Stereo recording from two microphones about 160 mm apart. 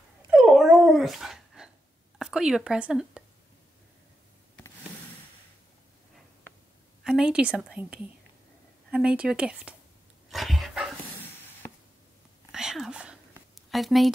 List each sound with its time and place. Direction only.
0.3 s dog: centre (ahead or behind)
2.1 s speech: 5° right (ahead or behind)
7.1 s a woman's voice: 5° right (ahead or behind)
10.3 s dog: centre (ahead or behind)
12.5 s a sound: centre (ahead or behind)
13.6 s speech: centre (ahead or behind)